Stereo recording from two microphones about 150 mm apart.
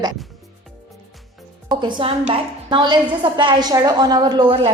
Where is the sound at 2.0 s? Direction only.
40° right (ahead or behind).